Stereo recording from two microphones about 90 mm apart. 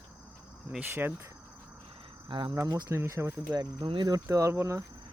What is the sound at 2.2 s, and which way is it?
Speech, 60° right (ahead or behind).